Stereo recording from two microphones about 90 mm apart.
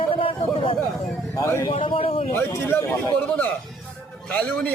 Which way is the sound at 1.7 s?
75° left (ahead or behind).